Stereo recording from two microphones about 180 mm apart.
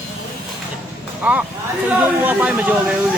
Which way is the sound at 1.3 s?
10° right (ahead or behind).